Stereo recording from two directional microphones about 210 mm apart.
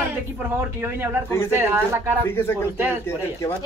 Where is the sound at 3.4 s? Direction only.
15° left (ahead or behind).